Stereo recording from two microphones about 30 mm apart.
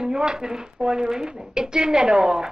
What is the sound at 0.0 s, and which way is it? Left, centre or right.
A woman's voice, right.